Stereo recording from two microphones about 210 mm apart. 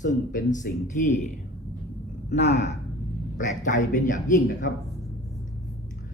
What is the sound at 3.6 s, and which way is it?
Speech, 35° left (ahead or behind).